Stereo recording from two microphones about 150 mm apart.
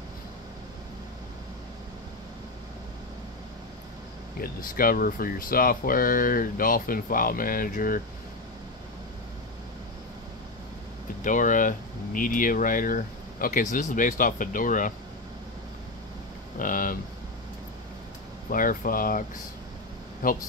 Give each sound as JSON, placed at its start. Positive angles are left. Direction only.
{"t": 4.4, "sound": "speech", "side_deg": 75}
{"t": 11.2, "sound": "speech", "side_deg": 60}
{"t": 16.5, "sound": "speech", "side_deg": 65}
{"t": 18.5, "sound": "speech", "side_deg": 65}